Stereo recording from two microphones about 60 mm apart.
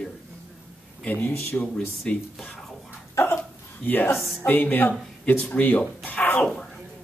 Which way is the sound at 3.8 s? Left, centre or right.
Left.